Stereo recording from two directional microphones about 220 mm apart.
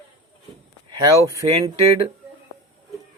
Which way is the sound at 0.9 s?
15° right (ahead or behind).